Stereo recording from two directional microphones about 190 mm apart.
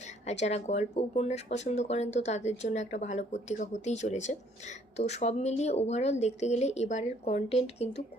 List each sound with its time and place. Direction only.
0.3 s speech: 35° left (ahead or behind)